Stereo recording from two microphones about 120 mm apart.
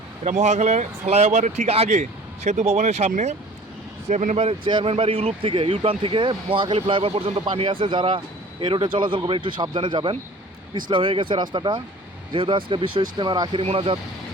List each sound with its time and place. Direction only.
0.3 s speech: 75° right (ahead or behind)
4.1 s speech: 90° right
4.4 s speech: 50° right (ahead or behind)
13.6 s speech: 50° right (ahead or behind)